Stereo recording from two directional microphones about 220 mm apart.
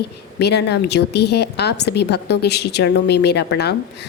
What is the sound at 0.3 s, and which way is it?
A woman's voice, 50° left (ahead or behind).